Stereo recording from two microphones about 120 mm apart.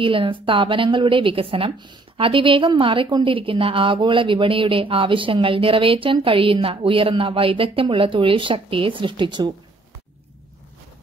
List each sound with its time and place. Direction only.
0.0 s a woman's voice: 45° right (ahead or behind)